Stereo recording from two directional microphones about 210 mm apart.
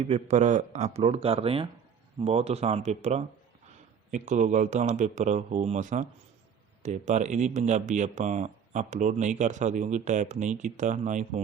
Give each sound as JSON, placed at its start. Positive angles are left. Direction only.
{"t": 0.0, "sound": "speech", "side_deg": -30}